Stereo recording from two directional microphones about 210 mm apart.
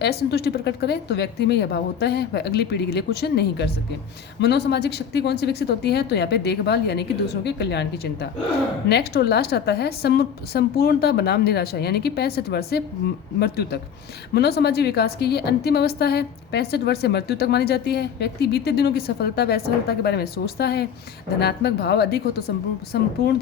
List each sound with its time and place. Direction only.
0.0 s a woman's voice: 50° left (ahead or behind)